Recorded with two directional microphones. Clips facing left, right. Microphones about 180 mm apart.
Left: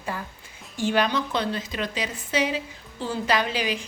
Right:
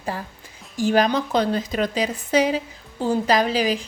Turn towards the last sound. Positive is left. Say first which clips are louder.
# right 6 dB
turn(degrees=-40)  # may be behind; listen again after turning